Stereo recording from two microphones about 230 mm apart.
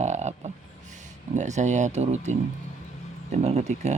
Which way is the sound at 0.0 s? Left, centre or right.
Right.